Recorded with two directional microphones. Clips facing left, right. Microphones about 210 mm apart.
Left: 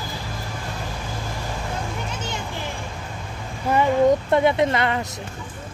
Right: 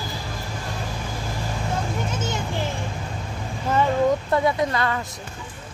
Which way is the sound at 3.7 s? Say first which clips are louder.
Left 3 dB; 15° left (ahead or behind).